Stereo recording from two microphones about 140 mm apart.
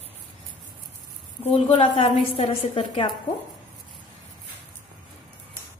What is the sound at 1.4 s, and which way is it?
A woman's voice, 40° left (ahead or behind).